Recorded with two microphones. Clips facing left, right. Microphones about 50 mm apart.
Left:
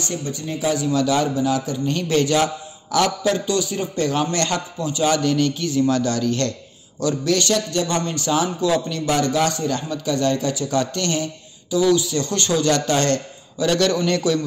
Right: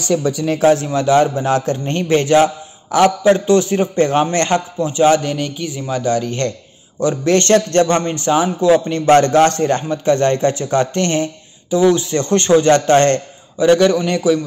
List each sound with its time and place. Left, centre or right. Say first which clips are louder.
0.6 s a man's voice: right 9 dB; right
0.8 s a man's voice: right 5 dB; right
1.4 s a man's voice: right 4 dB; right
2.0 s a man's voice: right 7 dB; right
7.3 s a man's voice: right 8 dB; right
8.0 s a man's voice: right 5 dB; right
9.1 s a man's voice: right 9 dB; right
13.6 s a man's voice: right 7 dB; right